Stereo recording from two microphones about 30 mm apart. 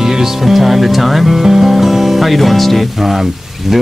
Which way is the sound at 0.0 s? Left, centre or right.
Centre.